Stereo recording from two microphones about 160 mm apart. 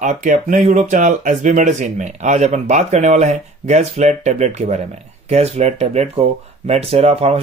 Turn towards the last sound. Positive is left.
turn(degrees=-40)  # may be behind; listen again after turning